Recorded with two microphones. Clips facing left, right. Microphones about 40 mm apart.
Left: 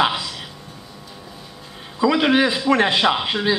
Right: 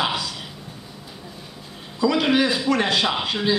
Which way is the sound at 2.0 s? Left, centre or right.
Left.